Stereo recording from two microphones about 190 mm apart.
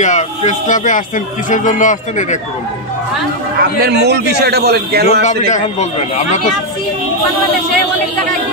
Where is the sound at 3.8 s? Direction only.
60° right (ahead or behind).